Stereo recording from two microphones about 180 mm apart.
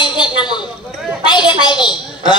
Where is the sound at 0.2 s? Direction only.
25° left (ahead or behind).